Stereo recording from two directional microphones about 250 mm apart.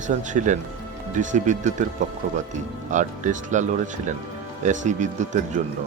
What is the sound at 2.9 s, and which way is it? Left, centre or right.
Speech, right.